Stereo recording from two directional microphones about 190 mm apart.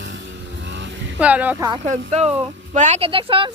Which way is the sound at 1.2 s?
5° right (ahead or behind).